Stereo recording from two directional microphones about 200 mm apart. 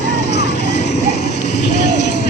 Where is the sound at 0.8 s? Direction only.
35° left (ahead or behind).